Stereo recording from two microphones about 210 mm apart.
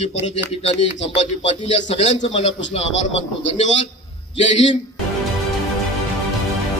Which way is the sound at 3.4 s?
35° left (ahead or behind).